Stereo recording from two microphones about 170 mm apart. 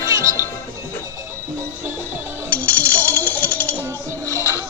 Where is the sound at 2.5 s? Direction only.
10° left (ahead or behind).